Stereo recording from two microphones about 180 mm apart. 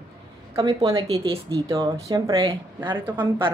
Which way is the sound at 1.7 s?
20° right (ahead or behind).